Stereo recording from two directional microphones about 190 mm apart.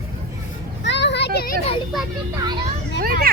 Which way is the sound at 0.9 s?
65° left (ahead or behind).